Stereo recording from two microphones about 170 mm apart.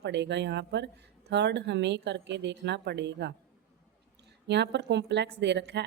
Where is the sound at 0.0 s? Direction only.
90° right.